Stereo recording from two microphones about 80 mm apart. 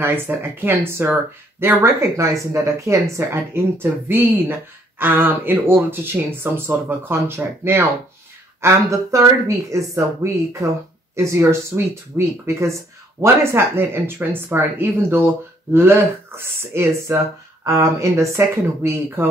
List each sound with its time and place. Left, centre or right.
0.0 s speech: right